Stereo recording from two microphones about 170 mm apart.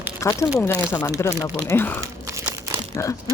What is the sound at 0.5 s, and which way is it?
Speech, 15° left (ahead or behind).